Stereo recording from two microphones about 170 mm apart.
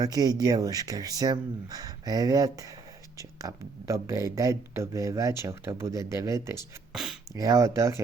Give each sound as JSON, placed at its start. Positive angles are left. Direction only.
{"t": 0.0, "sound": "speech", "side_deg": -20}
{"t": 6.9, "sound": "speech", "side_deg": 0}
{"t": 7.3, "sound": "speech", "side_deg": -20}